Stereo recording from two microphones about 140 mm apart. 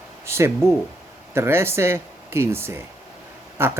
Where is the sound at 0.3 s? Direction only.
20° right (ahead or behind).